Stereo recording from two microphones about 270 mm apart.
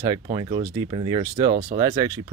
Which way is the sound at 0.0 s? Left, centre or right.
Centre.